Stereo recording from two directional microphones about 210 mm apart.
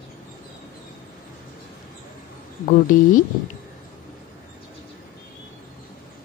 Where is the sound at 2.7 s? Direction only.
40° left (ahead or behind).